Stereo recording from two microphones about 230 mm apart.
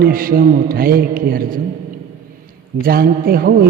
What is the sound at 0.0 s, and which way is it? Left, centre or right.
A man's voice, right.